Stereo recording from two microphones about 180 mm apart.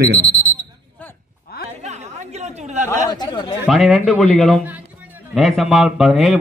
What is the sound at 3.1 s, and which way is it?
Chatter, 20° left (ahead or behind).